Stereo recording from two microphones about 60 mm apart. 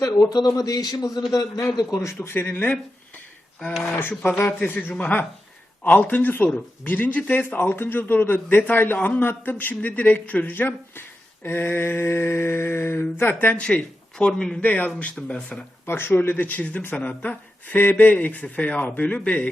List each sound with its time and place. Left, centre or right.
0.0 s a man's voice: left
2.1 s mantra: left
4.1 s speech: left
4.4 s mantra: left
5.8 s speech: left
6.8 s mantra: left
13.6 s a man's voice: centre
14.6 s speech: left
15.5 s speech: centre
15.9 s speech: left